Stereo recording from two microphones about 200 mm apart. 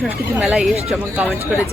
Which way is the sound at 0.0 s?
5° right (ahead or behind).